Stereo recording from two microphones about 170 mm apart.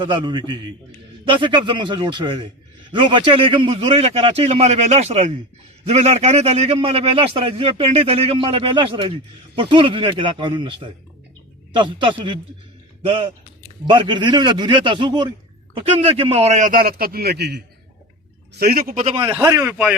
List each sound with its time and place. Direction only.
0.0 s a man's voice: 25° right (ahead or behind); by 17.6 s 75° right (ahead or behind)
18.6 s a man's voice: 60° right (ahead or behind)
19.1 s a man's voice: 25° right (ahead or behind)